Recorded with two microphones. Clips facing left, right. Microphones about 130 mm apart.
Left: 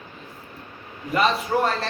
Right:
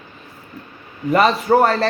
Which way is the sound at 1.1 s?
70° right (ahead or behind).